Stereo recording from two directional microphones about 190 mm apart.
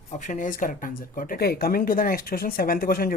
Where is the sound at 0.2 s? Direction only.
40° left (ahead or behind).